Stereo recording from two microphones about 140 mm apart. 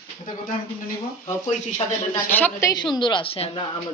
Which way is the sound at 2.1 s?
15° left (ahead or behind).